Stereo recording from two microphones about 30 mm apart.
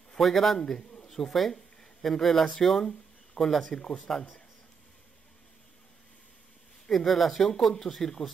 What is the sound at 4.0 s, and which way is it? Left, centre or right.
Speech, left.